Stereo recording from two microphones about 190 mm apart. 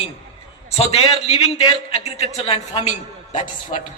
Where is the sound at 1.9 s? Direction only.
35° left (ahead or behind).